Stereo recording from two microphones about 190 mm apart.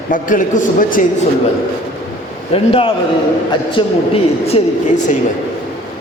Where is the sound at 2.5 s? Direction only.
30° left (ahead or behind).